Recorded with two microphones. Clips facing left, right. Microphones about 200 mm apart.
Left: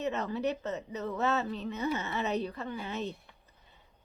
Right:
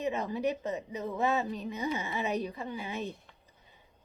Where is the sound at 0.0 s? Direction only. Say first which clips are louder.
Right 1 dB; 10° right (ahead or behind).